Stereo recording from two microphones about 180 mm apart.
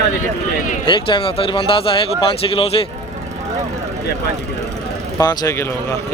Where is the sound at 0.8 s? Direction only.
25° left (ahead or behind).